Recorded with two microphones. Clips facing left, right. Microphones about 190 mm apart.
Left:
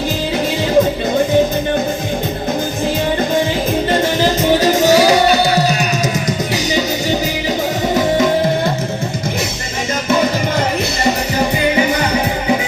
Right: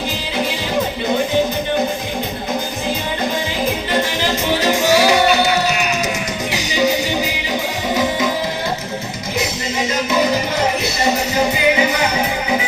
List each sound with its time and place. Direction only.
4.9 s music: 40° left (ahead or behind)